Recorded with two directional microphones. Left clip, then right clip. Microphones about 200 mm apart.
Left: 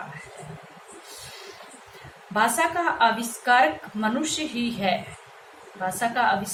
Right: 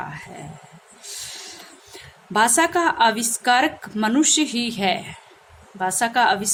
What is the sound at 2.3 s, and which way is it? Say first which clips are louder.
A woman's voice: right 4 dB; 60° right (ahead or behind).